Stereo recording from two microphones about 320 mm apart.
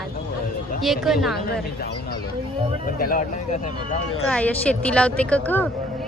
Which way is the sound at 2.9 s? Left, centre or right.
Left.